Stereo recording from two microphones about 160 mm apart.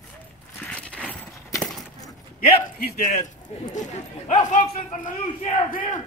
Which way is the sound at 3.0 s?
50° left (ahead or behind).